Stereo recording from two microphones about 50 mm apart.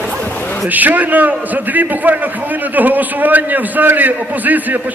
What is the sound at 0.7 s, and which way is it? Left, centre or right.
A man's voice, right.